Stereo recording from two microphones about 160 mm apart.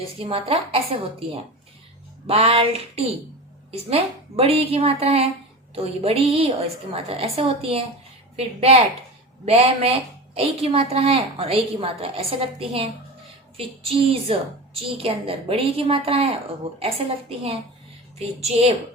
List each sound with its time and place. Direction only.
0.2 s a woman's voice: 35° right (ahead or behind)
2.2 s a woman's voice: 40° right (ahead or behind)